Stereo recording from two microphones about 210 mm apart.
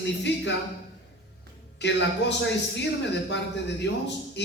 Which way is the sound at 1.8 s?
55° left (ahead or behind).